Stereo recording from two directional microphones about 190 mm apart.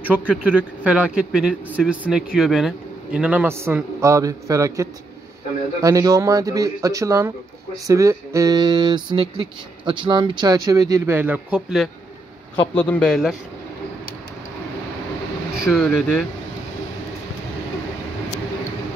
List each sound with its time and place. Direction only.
0.0 s speech: 5° right (ahead or behind)
12.7 s speech: 10° left (ahead or behind)
15.6 s speech: centre (ahead or behind)